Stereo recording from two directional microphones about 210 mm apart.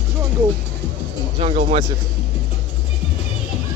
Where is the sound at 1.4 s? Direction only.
30° right (ahead or behind).